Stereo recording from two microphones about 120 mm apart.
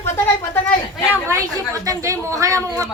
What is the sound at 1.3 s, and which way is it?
Speech, 30° right (ahead or behind).